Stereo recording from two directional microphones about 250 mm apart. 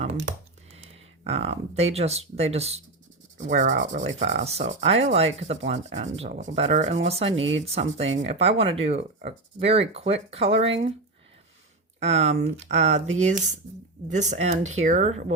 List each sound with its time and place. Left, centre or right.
1.2 s speech: right
11.9 s speech: right